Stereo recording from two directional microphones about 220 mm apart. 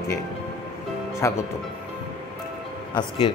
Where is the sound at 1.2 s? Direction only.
15° left (ahead or behind).